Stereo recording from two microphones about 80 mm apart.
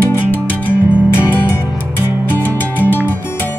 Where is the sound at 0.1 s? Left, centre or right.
Left.